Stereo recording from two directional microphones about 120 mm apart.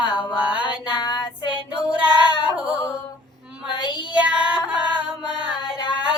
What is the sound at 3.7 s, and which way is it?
Child singing, 40° left (ahead or behind).